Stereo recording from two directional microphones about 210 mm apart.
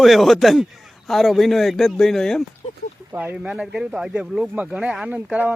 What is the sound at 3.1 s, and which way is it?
A man's voice, 10° right (ahead or behind).